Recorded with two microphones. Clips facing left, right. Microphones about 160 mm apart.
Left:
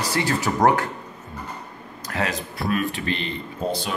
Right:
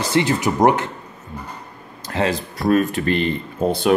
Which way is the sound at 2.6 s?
45° right (ahead or behind).